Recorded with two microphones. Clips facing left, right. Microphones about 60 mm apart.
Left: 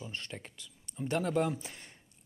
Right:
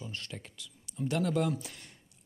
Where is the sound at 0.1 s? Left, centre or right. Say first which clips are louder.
Even; centre.